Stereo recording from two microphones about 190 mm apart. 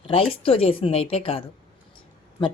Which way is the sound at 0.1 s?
30° left (ahead or behind).